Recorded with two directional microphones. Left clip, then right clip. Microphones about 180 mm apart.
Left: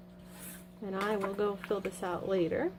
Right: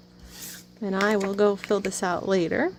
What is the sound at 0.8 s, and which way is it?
Speech, 55° right (ahead or behind).